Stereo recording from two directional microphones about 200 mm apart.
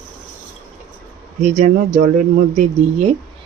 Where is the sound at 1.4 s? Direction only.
40° right (ahead or behind).